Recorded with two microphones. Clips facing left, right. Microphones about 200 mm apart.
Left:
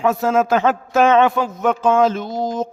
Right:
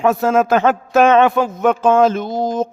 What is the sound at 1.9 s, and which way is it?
Speech, 50° right (ahead or behind).